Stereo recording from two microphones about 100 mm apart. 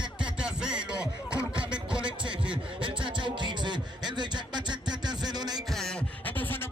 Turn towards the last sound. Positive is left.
turn(degrees=20)  # may be behind; listen again after turning